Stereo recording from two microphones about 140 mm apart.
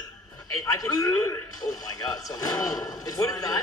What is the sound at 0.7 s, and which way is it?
A man's voice, 25° left (ahead or behind).